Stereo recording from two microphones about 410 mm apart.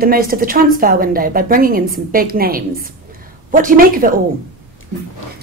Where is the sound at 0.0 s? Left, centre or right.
Right.